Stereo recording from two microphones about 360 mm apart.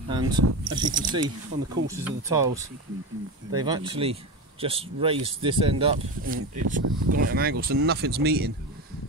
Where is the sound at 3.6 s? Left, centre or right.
Centre.